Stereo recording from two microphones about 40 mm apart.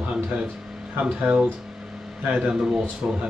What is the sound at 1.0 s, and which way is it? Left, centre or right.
Speech, right.